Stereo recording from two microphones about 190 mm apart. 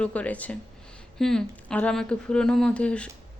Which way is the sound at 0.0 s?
5° left (ahead or behind).